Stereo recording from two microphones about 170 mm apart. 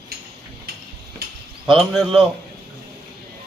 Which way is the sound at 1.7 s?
Centre (ahead or behind).